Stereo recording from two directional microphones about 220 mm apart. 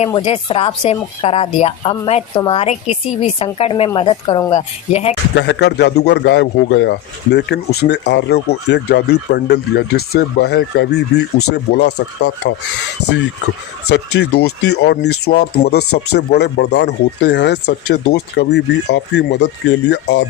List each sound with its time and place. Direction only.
0.0 s speech: 25° left (ahead or behind)
5.4 s a man's voice: 50° left (ahead or behind)
13.9 s a man's voice: 50° left (ahead or behind)
15.8 s speech: 90° left
16.1 s a man's voice: 50° left (ahead or behind)